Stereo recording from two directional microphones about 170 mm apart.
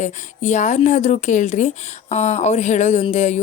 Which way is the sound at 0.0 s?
45° left (ahead or behind).